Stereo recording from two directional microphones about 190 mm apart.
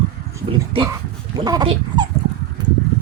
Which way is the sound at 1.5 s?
20° right (ahead or behind).